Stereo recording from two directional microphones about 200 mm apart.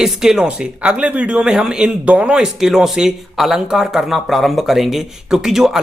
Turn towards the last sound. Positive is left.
turn(degrees=0)  # may be behind; listen again after turning